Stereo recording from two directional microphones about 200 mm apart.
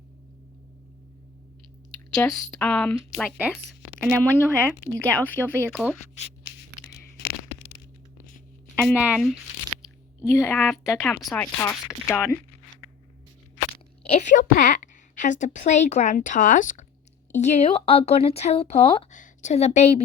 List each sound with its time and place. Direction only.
2.1 s speech: 15° left (ahead or behind); by 3.6 s 5° right (ahead or behind)
4.0 s speech: 10° left (ahead or behind)
9.0 s speech: centre (ahead or behind)
9.8 s speech: 15° left (ahead or behind)
13.7 s a woman's voice: 30° left (ahead or behind)